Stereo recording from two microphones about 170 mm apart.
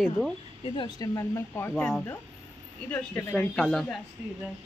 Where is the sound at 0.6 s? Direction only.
30° left (ahead or behind); by 3.9 s centre (ahead or behind).